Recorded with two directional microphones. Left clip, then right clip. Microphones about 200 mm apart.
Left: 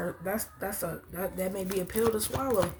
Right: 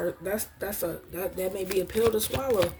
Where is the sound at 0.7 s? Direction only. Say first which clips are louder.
Right 4 dB; 45° right (ahead or behind).